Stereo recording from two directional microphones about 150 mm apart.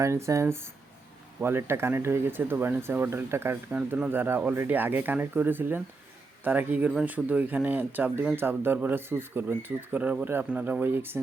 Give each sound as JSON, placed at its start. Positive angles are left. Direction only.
{"t": 0.0, "sound": "speech", "side_deg": -20}